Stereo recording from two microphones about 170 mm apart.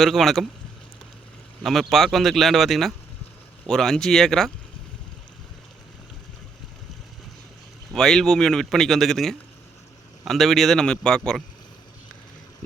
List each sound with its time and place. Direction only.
0.0 s speech: centre (ahead or behind)
1.6 s speech: centre (ahead or behind)
7.9 s speech: 5° left (ahead or behind)